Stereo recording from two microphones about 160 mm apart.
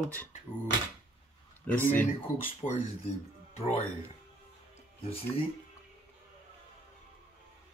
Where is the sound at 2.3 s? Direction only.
55° left (ahead or behind).